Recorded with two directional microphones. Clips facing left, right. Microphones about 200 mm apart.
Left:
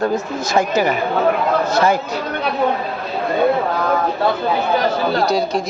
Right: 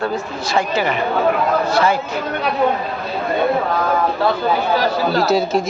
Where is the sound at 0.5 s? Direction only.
45° left (ahead or behind).